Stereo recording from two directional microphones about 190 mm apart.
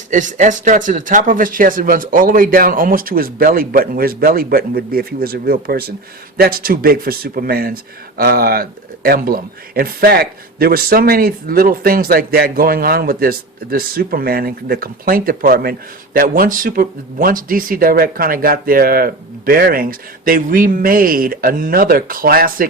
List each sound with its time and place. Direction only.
0.1 s speech: 40° right (ahead or behind)